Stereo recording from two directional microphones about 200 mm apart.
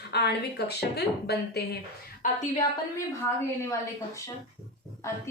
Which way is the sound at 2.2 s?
45° left (ahead or behind).